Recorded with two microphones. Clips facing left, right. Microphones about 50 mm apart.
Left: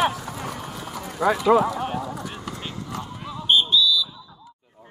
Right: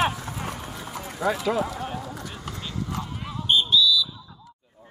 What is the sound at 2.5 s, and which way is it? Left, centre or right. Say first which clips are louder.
Clip-clop: right 1 dB; left.